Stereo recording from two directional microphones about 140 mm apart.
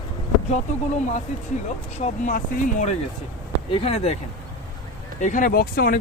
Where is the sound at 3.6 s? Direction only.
45° left (ahead or behind).